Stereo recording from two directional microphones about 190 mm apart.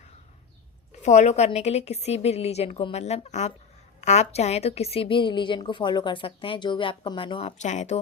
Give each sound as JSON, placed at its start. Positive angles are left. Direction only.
{"t": 1.0, "sound": "a woman's voice", "side_deg": 35}